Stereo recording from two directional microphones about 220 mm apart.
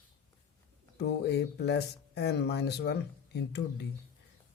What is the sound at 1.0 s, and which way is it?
Speech, 50° left (ahead or behind).